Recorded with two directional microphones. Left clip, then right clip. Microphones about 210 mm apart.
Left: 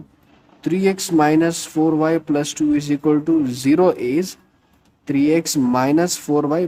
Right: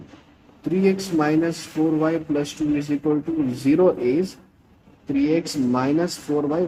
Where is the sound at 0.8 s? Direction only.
50° left (ahead or behind).